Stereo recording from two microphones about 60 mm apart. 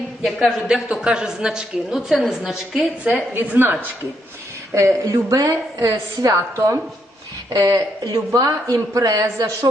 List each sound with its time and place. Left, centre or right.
0.3 s a man's voice: centre
1.0 s a woman's voice: centre
3.6 s speech: right
4.7 s a woman's voice: right
7.5 s a woman's voice: right